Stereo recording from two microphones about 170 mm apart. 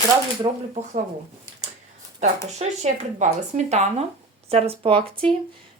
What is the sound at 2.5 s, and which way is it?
Speech, 45° right (ahead or behind).